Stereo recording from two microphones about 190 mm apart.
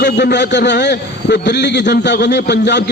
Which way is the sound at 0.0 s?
65° left (ahead or behind).